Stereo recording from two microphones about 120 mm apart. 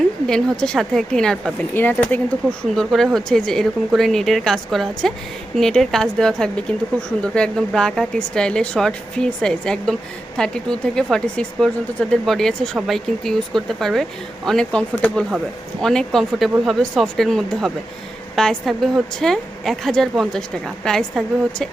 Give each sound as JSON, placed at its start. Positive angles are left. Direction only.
{"t": 0.3, "sound": "speech", "side_deg": 5}
{"t": 1.7, "sound": "speech", "side_deg": 15}
{"t": 2.6, "sound": "speech", "side_deg": 0}